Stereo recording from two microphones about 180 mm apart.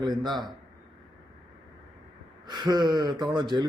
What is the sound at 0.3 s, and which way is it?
Speech, 25° right (ahead or behind).